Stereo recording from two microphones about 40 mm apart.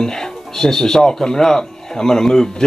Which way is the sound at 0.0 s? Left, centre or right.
Centre.